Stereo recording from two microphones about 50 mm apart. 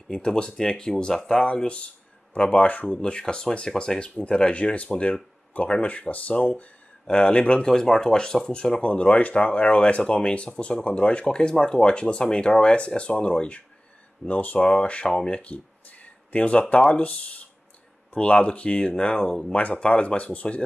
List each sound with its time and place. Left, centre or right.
0.1 s speech: centre; by 2.9 s left
2.9 s speech: centre